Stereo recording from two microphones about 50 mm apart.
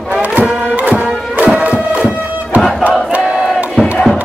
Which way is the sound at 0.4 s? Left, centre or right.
Right.